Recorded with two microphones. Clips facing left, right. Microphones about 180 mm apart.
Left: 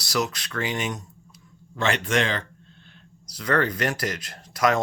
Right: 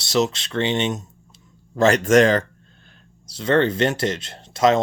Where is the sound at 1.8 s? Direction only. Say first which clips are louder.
Right 9 dB; 40° right (ahead or behind).